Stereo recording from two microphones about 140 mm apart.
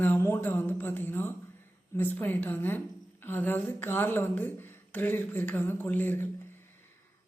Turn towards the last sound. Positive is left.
turn(degrees=15)  # may be behind; listen again after turning